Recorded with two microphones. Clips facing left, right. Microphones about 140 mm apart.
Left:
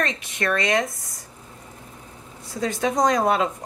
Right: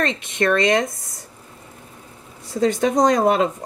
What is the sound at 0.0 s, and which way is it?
Speech, 30° right (ahead or behind).